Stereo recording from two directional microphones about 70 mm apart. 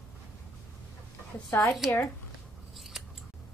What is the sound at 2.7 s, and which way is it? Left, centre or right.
Scissors, centre.